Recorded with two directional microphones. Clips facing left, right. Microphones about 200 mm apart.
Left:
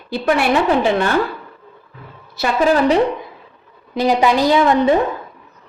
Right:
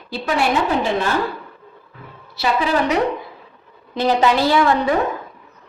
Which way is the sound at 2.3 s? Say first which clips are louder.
Left 4 dB; 45° left (ahead or behind).